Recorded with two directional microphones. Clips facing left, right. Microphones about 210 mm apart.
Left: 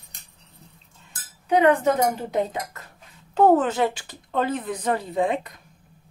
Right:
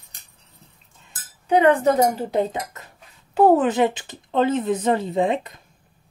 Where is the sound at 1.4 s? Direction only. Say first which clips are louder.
Right 2 dB; 30° right (ahead or behind).